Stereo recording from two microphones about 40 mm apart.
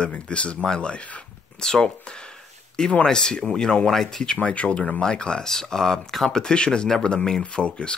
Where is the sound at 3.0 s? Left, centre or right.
Centre.